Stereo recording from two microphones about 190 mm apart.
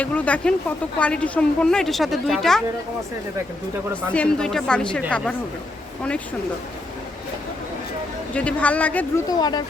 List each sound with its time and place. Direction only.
0.0 s a woman's voice: 5° left (ahead or behind)
4.1 s a woman's voice: 5° left (ahead or behind)
8.3 s speech: 5° left (ahead or behind)
9.4 s speech: 20° left (ahead or behind)